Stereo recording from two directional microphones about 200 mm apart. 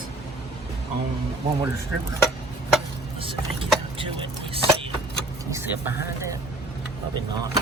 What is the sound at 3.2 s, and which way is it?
Vehicle, 25° right (ahead or behind).